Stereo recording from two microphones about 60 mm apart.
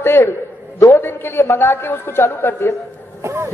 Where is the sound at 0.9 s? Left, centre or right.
Left.